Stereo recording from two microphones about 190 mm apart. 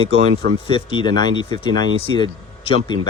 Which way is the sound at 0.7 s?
25° left (ahead or behind).